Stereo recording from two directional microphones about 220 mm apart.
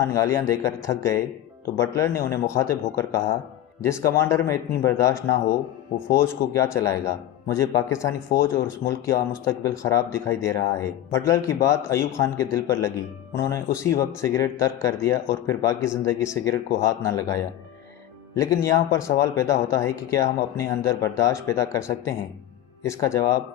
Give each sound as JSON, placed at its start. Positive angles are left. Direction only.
{"t": 0.0, "sound": "speech", "side_deg": 15}
{"t": 8.3, "sound": "speech", "side_deg": 45}
{"t": 8.9, "sound": "speech", "side_deg": 15}